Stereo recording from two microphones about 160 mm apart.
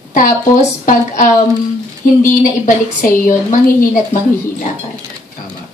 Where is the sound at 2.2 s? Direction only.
55° left (ahead or behind).